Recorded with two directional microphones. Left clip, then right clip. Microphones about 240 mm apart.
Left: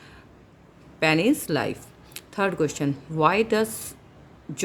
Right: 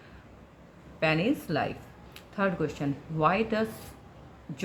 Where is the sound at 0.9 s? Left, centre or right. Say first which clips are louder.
Left 6 dB; left.